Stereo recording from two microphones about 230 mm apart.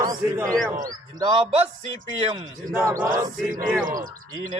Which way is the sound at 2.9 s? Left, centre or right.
Right.